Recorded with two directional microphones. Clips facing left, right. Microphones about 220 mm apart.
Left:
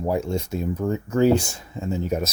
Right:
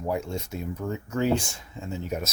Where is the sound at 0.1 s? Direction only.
30° left (ahead or behind).